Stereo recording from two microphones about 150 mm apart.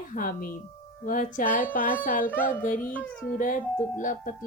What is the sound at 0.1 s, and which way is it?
Speech, 65° left (ahead or behind).